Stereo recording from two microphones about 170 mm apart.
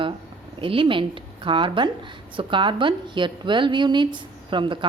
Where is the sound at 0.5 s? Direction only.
30° right (ahead or behind).